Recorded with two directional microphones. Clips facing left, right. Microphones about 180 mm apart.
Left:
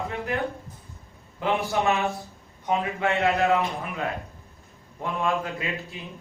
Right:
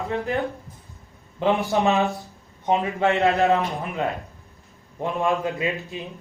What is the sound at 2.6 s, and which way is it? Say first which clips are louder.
A man's voice: right 4 dB; 30° right (ahead or behind).